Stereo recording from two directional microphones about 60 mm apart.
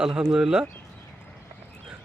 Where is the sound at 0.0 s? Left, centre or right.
Centre.